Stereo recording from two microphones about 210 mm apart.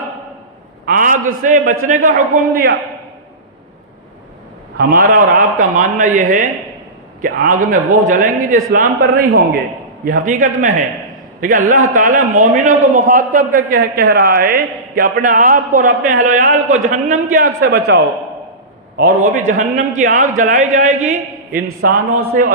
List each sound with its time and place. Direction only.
0.9 s a sound: 40° right (ahead or behind)
1.4 s a man's voice: 40° right (ahead or behind)
4.8 s a man's voice: 45° right (ahead or behind)
22.3 s a man's voice: 45° right (ahead or behind)